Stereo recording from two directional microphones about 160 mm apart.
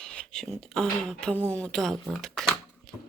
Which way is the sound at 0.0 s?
5° left (ahead or behind).